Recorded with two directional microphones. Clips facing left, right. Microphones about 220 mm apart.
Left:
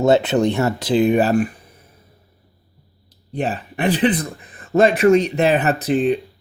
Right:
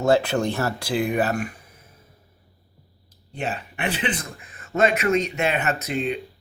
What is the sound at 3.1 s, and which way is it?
Speech, 35° left (ahead or behind).